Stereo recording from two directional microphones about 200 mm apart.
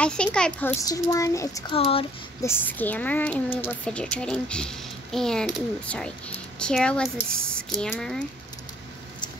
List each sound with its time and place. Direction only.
0.0 s a child's voice: 5° left (ahead or behind)
1.8 s speech: 30° left (ahead or behind)
2.4 s a woman's voice: 10° left (ahead or behind)